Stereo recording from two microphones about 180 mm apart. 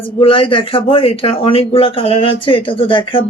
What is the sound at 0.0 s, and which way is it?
Speech, 30° left (ahead or behind).